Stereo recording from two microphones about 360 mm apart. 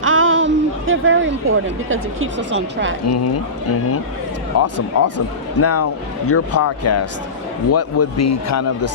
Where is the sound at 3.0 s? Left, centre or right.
Left.